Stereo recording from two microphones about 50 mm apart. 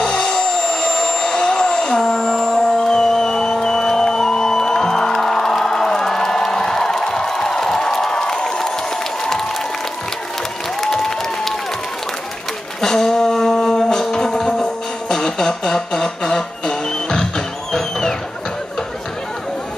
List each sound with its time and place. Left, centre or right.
0.0 s vehicle: centre
9.2 s applause: centre
10.8 s applause: centre
12.8 s music: centre